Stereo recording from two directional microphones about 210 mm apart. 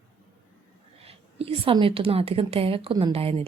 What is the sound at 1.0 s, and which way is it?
A woman's voice, 30° right (ahead or behind).